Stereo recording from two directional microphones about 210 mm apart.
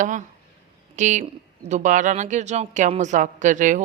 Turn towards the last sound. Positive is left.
turn(degrees=-35)  # may be behind; listen again after turning